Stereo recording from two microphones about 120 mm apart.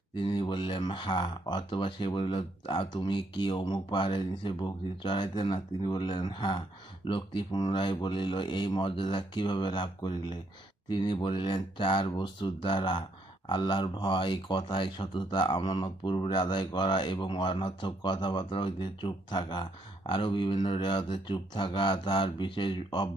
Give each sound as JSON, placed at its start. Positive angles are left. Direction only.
{"t": 0.1, "sound": "speech", "side_deg": 40}